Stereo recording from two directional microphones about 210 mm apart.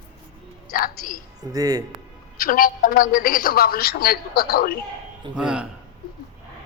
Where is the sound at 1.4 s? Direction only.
15° right (ahead or behind).